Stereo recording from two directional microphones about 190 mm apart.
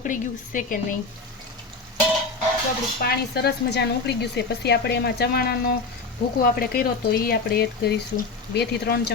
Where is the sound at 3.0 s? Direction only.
55° left (ahead or behind).